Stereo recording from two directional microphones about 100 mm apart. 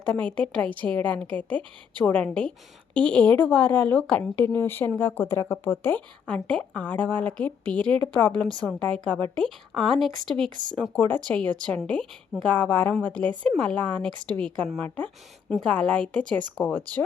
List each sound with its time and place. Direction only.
0.0 s a woman's voice: 15° left (ahead or behind)
4.4 s speech: 20° left (ahead or behind)
6.2 s a woman's voice: 10° left (ahead or behind)
10.9 s a woman's voice: 15° left (ahead or behind)
15.4 s a woman's voice: 5° left (ahead or behind)